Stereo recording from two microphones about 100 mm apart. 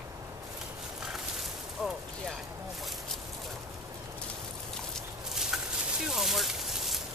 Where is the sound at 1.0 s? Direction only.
5° right (ahead or behind).